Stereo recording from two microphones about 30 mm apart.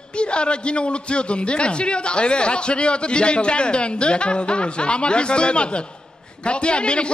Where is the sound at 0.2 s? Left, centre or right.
Left.